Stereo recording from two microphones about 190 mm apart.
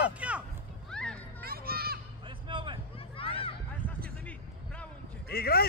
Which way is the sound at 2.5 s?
25° right (ahead or behind).